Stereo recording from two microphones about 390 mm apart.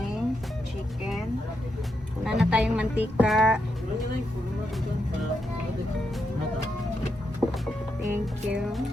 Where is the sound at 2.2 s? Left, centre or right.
Centre.